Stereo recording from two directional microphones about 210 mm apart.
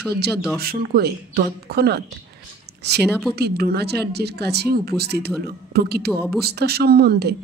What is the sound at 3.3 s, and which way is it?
Speech, 50° right (ahead or behind).